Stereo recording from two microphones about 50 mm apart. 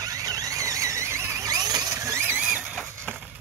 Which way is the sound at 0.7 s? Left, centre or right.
Right.